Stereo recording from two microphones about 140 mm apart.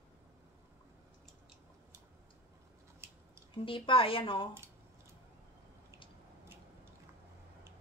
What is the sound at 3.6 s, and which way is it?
Speech, 40° left (ahead or behind).